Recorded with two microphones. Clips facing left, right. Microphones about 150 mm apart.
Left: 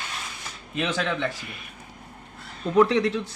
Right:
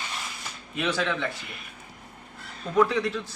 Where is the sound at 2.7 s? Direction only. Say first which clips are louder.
Left 3 dB; 30° left (ahead or behind).